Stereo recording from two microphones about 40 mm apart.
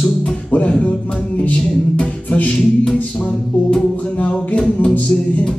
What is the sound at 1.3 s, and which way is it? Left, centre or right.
Music, left.